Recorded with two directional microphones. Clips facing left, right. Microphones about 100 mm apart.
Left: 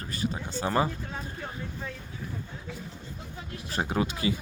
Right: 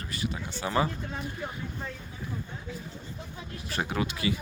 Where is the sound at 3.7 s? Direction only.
30° left (ahead or behind).